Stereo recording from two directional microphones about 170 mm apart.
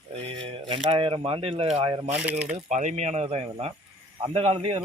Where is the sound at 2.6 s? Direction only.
45° right (ahead or behind).